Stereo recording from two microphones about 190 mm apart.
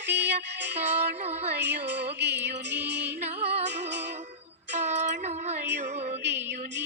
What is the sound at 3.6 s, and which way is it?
Music, 65° right (ahead or behind).